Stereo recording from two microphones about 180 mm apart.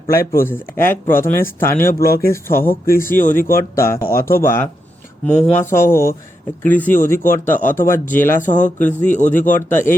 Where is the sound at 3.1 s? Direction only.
50° left (ahead or behind).